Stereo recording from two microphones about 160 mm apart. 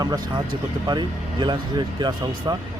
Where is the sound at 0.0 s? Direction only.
25° right (ahead or behind).